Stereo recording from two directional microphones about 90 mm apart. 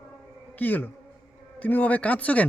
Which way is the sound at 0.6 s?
20° left (ahead or behind).